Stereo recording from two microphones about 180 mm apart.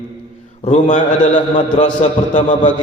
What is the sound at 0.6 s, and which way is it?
Speech, 40° left (ahead or behind).